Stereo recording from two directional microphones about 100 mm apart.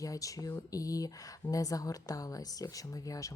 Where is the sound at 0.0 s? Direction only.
35° left (ahead or behind).